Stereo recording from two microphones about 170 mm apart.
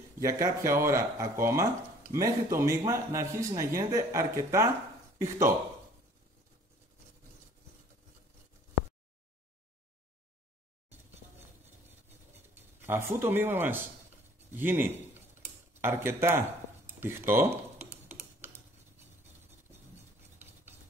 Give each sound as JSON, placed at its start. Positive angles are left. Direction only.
{"t": 0.2, "sound": "speech", "side_deg": -20}
{"t": 12.8, "sound": "speech", "side_deg": -15}
{"t": 15.4, "sound": "tick-tock", "side_deg": -15}
{"t": 17.0, "sound": "speech", "side_deg": -15}